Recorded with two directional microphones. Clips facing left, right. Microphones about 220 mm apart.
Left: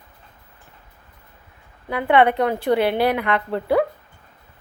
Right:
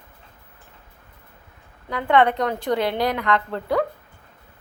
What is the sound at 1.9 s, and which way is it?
A woman's voice, 10° left (ahead or behind).